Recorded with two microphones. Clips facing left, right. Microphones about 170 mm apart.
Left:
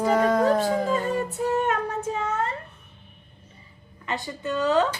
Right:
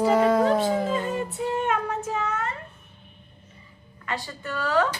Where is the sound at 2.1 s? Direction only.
30° left (ahead or behind).